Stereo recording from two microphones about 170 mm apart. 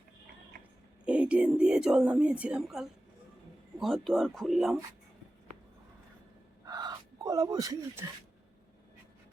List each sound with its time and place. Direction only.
1.0 s speech: 5° right (ahead or behind)
6.7 s gasp: 25° right (ahead or behind)